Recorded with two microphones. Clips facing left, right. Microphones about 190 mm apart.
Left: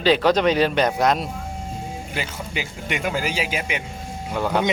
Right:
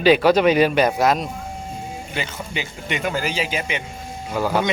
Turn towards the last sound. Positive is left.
turn(degrees=-5)  # may be behind; listen again after turning